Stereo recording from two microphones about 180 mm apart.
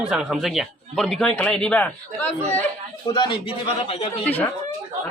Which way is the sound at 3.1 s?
25° left (ahead or behind).